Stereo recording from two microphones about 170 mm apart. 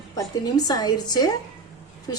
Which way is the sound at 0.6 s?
25° left (ahead or behind).